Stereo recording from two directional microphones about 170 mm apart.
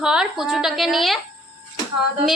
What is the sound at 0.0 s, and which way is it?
A woman's voice, 5° right (ahead or behind).